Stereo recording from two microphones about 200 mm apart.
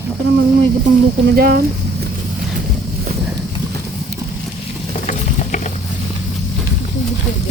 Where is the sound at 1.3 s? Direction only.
50° right (ahead or behind).